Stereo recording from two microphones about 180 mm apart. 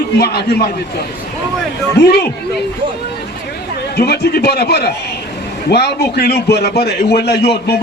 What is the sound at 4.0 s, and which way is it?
A man's voice, 60° left (ahead or behind).